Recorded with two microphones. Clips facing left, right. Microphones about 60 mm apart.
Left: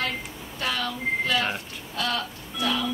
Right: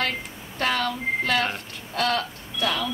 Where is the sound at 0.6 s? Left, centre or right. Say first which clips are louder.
Right 4 dB; right.